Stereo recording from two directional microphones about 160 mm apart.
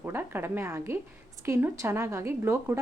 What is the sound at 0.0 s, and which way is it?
A woman's voice, 15° right (ahead or behind).